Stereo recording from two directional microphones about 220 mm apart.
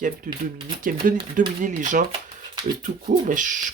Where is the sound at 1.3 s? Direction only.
35° right (ahead or behind).